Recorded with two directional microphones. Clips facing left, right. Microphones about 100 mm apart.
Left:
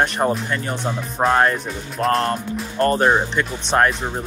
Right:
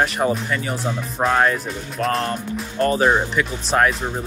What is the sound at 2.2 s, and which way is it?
Speech, 50° left (ahead or behind).